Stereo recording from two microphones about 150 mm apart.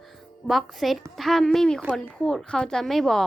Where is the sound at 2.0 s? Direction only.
5° left (ahead or behind).